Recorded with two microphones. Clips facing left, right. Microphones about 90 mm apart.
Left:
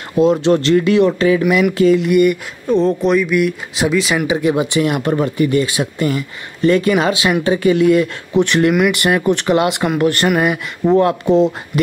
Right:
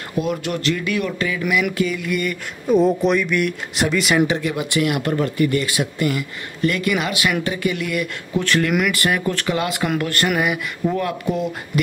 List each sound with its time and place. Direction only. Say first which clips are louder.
0.2 s speech: left 11 dB; 25° left (ahead or behind)
2.6 s speech: left 1 dB; 5° right (ahead or behind)
4.4 s speech: left 6 dB; 20° left (ahead or behind)